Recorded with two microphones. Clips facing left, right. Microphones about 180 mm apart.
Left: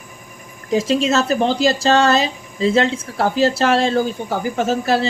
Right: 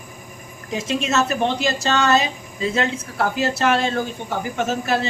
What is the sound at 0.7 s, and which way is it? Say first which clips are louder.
Speech: left 5 dB; 35° left (ahead or behind).